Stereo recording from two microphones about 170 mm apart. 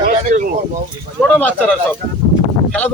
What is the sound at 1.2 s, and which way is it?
Speech, 10° left (ahead or behind).